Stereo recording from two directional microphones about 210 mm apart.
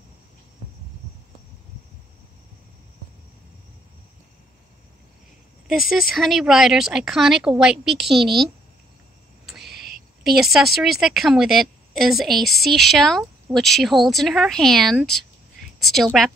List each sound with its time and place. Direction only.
5.7 s a woman's voice: centre (ahead or behind)
9.6 s owl: 50° right (ahead or behind)
10.2 s a woman's voice: centre (ahead or behind)